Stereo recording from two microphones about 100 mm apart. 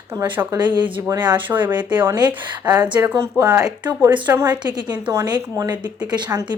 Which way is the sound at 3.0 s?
25° right (ahead or behind).